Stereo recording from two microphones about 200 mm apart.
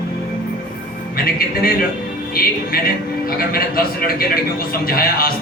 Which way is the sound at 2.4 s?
45° left (ahead or behind).